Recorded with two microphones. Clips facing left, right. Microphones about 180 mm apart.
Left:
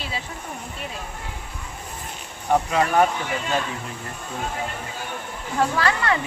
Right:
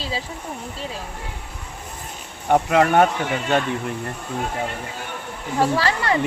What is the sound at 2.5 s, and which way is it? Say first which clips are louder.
Speech: right 4 dB; 65° right (ahead or behind).